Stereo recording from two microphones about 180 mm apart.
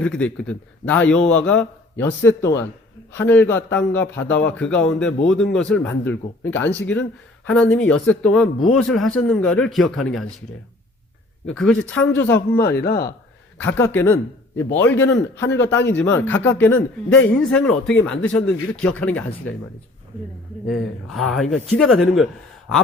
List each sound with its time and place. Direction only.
0.0 s a man's voice: 5° left (ahead or behind)
11.4 s a man's voice: 5° left (ahead or behind)
12.5 s speech: 60° left (ahead or behind)
13.6 s a man's voice: 10° left (ahead or behind)
15.4 s a man's voice: 80° left
15.9 s a man's voice: 10° left (ahead or behind)
20.7 s speech: centre (ahead or behind)